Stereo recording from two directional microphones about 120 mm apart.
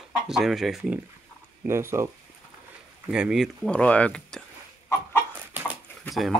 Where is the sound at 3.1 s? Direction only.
5° right (ahead or behind).